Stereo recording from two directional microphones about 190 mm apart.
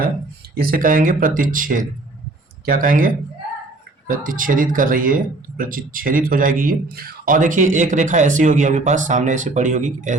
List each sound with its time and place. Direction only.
0.5 s speech: 50° right (ahead or behind)